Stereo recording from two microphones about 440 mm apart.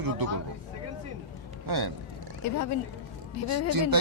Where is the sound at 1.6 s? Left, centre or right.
Right.